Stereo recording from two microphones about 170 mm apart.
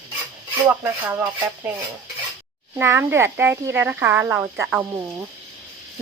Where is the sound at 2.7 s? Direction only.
15° right (ahead or behind).